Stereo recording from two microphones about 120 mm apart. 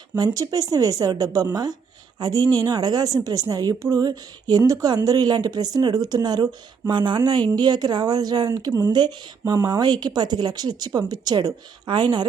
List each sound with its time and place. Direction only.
0.3 s speech: 30° right (ahead or behind)